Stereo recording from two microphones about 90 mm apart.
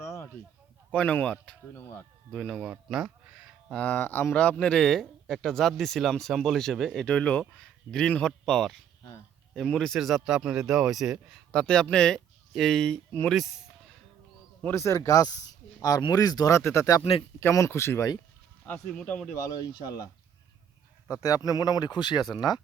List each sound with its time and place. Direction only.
0.0 s a sound: 30° left (ahead or behind)
0.9 s a man's voice: 15° left (ahead or behind)
2.6 s a sound: 5° right (ahead or behind)
3.8 s a man's voice: 15° left (ahead or behind); by 11.3 s 5° right (ahead or behind)
11.5 s a man's voice: 10° left (ahead or behind)
14.6 s speech: 25° left (ahead or behind); by 16.6 s 45° left (ahead or behind)
16.6 s speech: 30° left (ahead or behind)
17.0 s speech: 90° left
17.4 s speech: 30° left (ahead or behind)
18.9 s speech: 10° left (ahead or behind)
19.5 s speech: 45° left (ahead or behind)
21.2 s speech: 40° left (ahead or behind)